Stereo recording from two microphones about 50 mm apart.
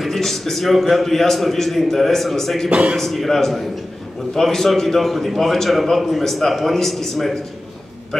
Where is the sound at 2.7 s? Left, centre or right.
Right.